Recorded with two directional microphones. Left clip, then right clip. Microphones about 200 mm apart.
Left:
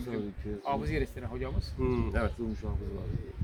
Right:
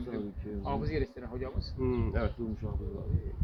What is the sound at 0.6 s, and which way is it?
Speech, 20° left (ahead or behind).